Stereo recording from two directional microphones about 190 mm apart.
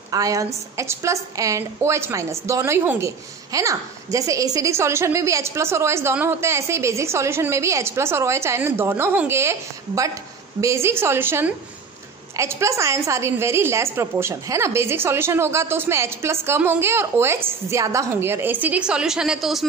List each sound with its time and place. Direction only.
0.1 s a woman's voice: 20° right (ahead or behind); by 19.6 s centre (ahead or behind)